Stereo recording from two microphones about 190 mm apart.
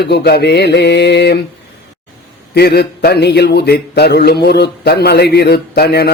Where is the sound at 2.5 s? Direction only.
60° left (ahead or behind).